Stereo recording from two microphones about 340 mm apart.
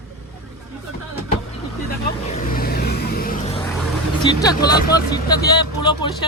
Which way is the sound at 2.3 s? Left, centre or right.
Left.